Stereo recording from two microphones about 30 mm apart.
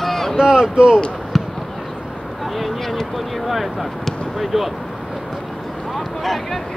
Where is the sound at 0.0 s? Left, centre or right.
Centre.